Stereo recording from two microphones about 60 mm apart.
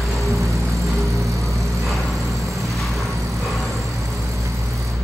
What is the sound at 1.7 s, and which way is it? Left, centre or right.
Vehicle, centre.